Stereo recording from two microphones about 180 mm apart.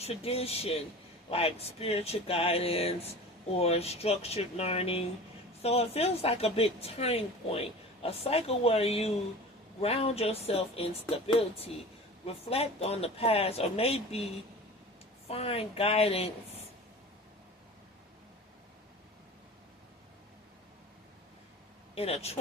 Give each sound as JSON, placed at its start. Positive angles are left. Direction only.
{"t": 0.0, "sound": "a woman's voice", "side_deg": 35}
{"t": 12.2, "sound": "a woman's voice", "side_deg": 35}
{"t": 21.9, "sound": "a woman's voice", "side_deg": 35}